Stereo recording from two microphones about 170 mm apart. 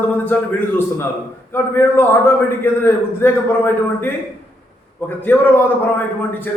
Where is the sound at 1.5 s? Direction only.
15° left (ahead or behind).